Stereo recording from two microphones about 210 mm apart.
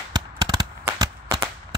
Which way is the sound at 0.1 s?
20° right (ahead or behind).